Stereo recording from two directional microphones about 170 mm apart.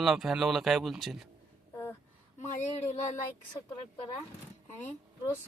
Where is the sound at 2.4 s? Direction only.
45° left (ahead or behind).